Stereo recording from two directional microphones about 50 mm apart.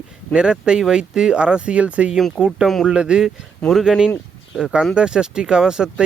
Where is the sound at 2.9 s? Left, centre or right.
Centre.